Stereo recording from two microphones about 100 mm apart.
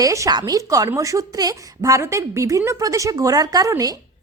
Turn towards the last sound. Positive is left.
turn(degrees=-35)  # may be behind; listen again after turning